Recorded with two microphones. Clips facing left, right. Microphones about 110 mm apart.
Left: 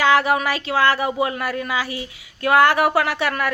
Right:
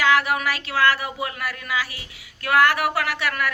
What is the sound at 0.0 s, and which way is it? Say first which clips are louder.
Speech: left 3 dB; 25° left (ahead or behind).